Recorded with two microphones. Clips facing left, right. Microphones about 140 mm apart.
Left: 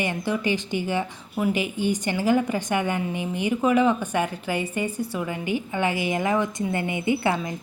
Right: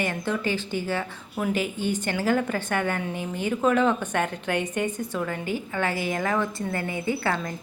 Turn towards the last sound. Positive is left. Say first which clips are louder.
# left 3 dB
turn(degrees=15)  # may be behind; listen again after turning